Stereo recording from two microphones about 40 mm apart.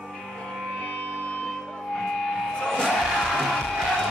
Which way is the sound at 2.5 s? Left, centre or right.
Centre.